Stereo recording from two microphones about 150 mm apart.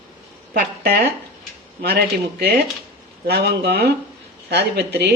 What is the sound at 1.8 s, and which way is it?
Speech, 90° right.